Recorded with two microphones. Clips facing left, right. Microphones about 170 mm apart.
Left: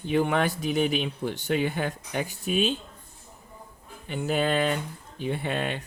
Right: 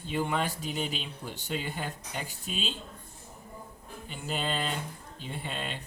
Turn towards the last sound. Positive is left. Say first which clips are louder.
# left 8 dB
turn(degrees=70)  # may be behind; listen again after turning